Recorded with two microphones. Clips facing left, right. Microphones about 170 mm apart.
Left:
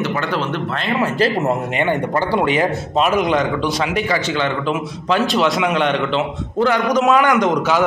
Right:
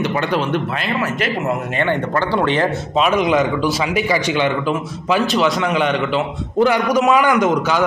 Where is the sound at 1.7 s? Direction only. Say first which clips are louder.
Even; 15° left (ahead or behind).